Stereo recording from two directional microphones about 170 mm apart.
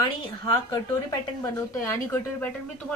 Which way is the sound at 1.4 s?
20° left (ahead or behind).